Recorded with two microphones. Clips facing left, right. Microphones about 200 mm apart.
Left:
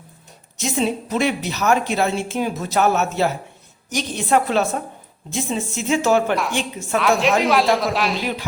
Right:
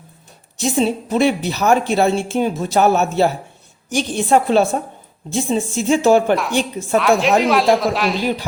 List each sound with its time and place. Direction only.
0.6 s a woman's voice: 30° right (ahead or behind)
6.3 s a woman's voice: centre (ahead or behind)